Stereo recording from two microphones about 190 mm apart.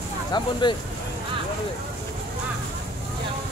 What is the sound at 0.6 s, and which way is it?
Speech, 25° left (ahead or behind).